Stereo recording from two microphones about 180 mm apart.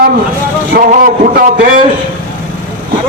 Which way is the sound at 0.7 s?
55° right (ahead or behind).